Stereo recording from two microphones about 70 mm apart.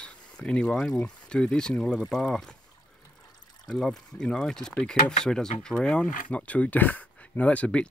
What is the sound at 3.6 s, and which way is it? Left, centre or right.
Speech, centre.